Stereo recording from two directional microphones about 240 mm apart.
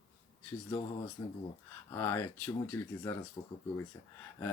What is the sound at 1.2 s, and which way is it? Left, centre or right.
A woman's voice, centre.